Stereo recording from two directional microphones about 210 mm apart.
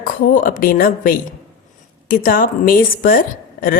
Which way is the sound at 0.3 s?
40° left (ahead or behind).